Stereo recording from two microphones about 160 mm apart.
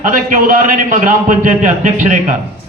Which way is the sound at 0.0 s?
55° right (ahead or behind).